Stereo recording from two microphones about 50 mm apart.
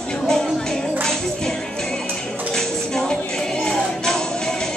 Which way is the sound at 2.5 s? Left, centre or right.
Centre.